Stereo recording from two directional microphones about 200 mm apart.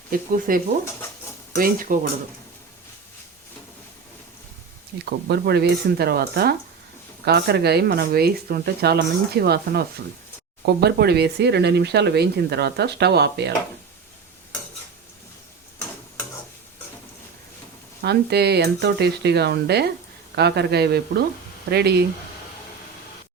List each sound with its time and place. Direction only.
0.1 s speech: 45° right (ahead or behind)
5.0 s speech: 55° right (ahead or behind)
18.0 s speech: 55° right (ahead or behind)